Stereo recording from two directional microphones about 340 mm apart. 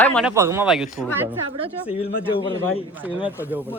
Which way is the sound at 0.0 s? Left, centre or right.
Centre.